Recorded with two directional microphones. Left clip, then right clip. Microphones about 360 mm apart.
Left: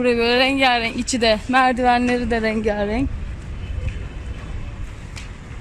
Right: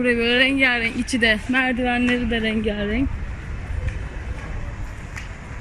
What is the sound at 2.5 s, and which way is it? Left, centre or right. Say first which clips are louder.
Speech: left 3 dB; left.